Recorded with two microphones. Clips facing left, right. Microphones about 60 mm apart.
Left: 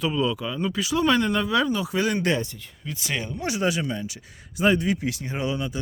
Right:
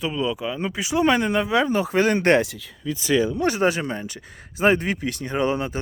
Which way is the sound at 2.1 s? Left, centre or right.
Right.